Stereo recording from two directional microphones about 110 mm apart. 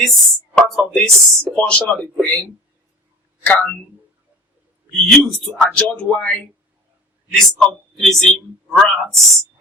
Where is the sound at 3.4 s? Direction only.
15° left (ahead or behind).